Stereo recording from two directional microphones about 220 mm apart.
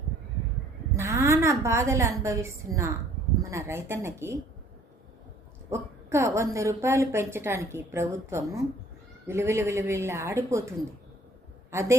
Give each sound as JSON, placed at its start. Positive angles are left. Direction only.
{"t": 0.9, "sound": "a woman's voice", "side_deg": -10}
{"t": 5.7, "sound": "a woman's voice", "side_deg": -10}